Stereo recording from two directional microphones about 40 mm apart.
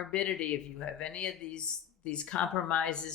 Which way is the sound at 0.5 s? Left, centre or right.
Left.